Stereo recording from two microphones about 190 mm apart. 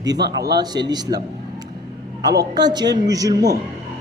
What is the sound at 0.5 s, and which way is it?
Speech, 20° right (ahead or behind).